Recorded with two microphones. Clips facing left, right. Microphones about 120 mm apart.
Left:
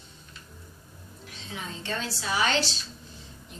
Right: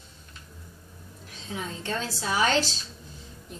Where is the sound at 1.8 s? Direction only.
40° right (ahead or behind).